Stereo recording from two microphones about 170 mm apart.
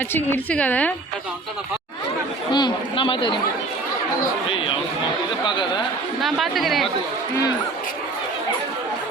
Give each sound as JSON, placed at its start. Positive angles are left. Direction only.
{"t": 0.1, "sound": "a woman's voice", "side_deg": 10}
{"t": 2.5, "sound": "a man's voice", "side_deg": 25}
{"t": 4.4, "sound": "a man's voice", "side_deg": 30}
{"t": 6.2, "sound": "speech", "side_deg": 0}